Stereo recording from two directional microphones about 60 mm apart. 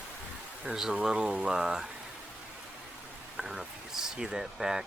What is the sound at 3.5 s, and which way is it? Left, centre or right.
Speech, centre.